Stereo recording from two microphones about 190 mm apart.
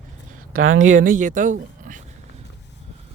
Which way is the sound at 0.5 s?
90° right.